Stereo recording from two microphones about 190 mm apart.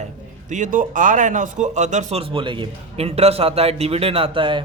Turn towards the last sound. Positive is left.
turn(degrees=-25)  # may be behind; listen again after turning